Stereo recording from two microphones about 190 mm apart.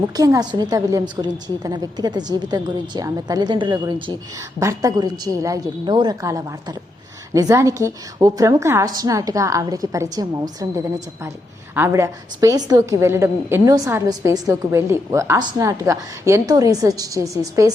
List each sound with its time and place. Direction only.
0.2 s a woman's voice: 20° right (ahead or behind)
11.7 s a woman's voice: 15° right (ahead or behind)